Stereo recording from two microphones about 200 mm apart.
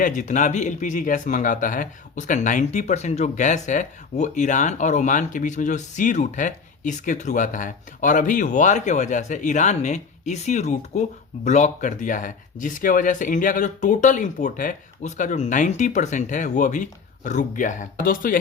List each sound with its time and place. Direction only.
0.0 s speech: 40° left (ahead or behind)